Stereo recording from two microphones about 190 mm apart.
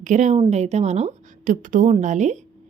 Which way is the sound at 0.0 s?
40° right (ahead or behind).